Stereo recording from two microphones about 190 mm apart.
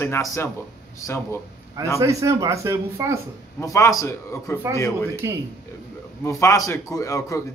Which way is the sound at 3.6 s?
15° left (ahead or behind).